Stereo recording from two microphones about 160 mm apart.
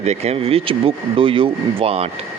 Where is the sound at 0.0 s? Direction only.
45° right (ahead or behind).